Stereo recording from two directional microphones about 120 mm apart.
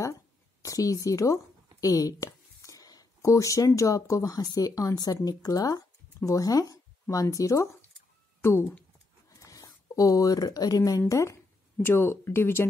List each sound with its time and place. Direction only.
0.6 s speech: 30° left (ahead or behind)
9.4 s speech: 30° left (ahead or behind)